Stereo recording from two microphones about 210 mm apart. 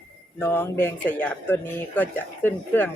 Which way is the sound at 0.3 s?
10° left (ahead or behind).